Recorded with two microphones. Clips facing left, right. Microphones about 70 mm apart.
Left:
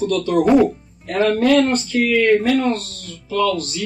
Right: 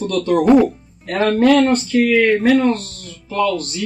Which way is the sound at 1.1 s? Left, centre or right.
Right.